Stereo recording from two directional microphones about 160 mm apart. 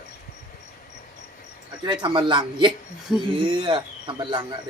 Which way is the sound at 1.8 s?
30° right (ahead or behind).